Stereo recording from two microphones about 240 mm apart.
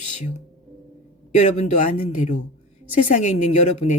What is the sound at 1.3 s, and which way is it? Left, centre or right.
A man's voice, left.